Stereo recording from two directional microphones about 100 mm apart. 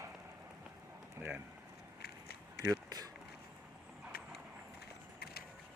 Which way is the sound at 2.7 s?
40° right (ahead or behind).